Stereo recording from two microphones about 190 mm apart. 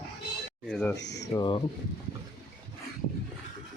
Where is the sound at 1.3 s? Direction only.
25° left (ahead or behind).